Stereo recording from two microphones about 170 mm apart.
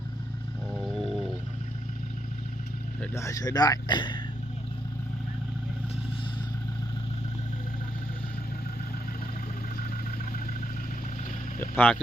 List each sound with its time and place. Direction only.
0.8 s a sound: centre (ahead or behind)
3.0 s speech: 15° left (ahead or behind)
11.8 s speech: 5° left (ahead or behind)